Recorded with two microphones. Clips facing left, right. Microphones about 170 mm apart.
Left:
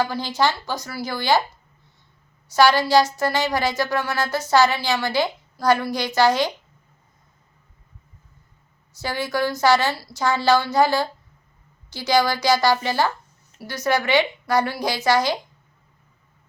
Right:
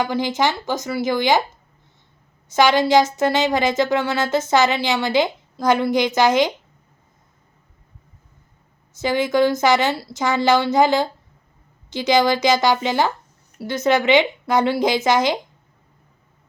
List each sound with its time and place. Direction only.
0.0 s speech: 20° right (ahead or behind)
2.5 s speech: 20° right (ahead or behind)
9.0 s speech: 20° right (ahead or behind)